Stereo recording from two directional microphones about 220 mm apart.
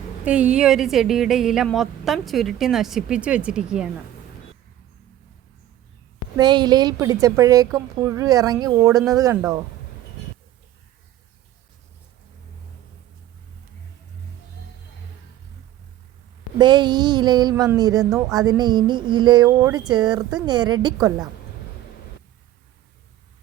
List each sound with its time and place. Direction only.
0.3 s a woman's voice: 5° right (ahead or behind)
6.3 s a woman's voice: 20° right (ahead or behind)
16.6 s speech: 20° right (ahead or behind)